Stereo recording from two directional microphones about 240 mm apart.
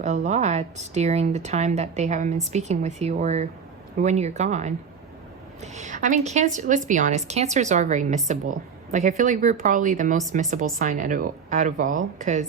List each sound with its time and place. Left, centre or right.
0.0 s a woman's voice: right